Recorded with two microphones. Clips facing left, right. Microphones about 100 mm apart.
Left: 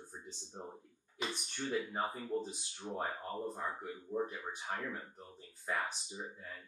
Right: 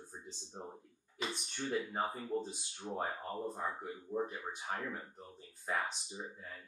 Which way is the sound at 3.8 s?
10° right (ahead or behind).